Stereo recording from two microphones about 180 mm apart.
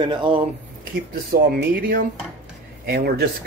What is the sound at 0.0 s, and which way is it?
Speech, 25° right (ahead or behind).